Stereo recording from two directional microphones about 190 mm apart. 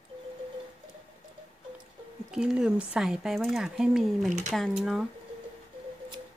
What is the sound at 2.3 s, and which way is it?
Speech, 5° right (ahead or behind).